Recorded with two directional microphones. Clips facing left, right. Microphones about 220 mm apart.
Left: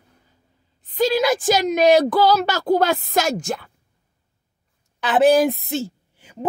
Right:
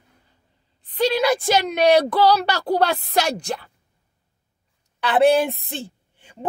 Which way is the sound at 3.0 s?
45° left (ahead or behind).